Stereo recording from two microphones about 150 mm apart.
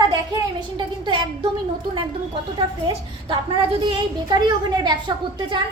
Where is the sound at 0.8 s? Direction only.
30° right (ahead or behind).